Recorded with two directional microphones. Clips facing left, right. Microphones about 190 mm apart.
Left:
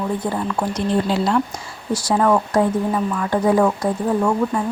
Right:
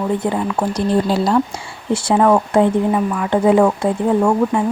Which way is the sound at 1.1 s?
35° right (ahead or behind).